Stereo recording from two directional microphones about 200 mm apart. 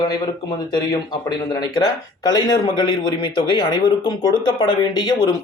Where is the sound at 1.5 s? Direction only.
20° left (ahead or behind).